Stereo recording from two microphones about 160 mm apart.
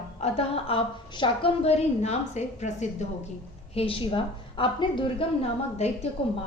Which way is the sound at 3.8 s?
35° left (ahead or behind).